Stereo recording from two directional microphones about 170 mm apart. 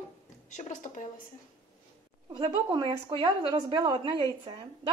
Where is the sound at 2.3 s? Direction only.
25° right (ahead or behind).